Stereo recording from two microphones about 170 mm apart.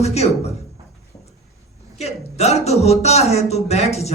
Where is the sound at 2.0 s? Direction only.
40° left (ahead or behind).